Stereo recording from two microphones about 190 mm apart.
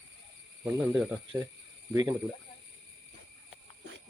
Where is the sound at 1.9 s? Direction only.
20° right (ahead or behind).